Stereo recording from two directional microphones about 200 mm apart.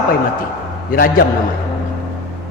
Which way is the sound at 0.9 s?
45° left (ahead or behind).